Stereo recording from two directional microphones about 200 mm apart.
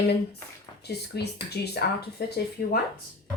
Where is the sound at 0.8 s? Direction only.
55° left (ahead or behind).